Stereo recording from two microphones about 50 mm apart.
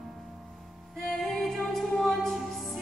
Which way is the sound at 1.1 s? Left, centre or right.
Centre.